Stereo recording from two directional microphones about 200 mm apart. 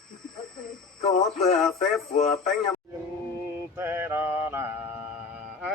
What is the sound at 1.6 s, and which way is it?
Speech, centre (ahead or behind).